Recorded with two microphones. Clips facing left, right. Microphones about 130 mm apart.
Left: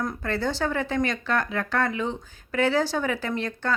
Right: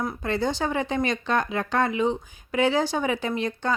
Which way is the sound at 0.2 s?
15° right (ahead or behind).